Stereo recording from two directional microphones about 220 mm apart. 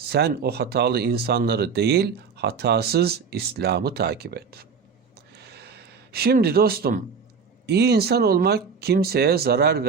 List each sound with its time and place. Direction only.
0.1 s speech: 45° right (ahead or behind)
5.4 s a sound: 50° right (ahead or behind)
7.7 s speech: 45° right (ahead or behind)